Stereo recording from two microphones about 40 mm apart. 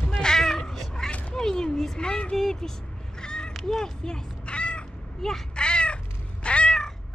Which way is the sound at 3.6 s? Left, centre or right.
Centre.